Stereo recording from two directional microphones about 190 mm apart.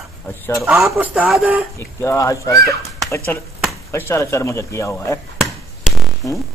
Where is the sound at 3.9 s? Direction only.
15° left (ahead or behind).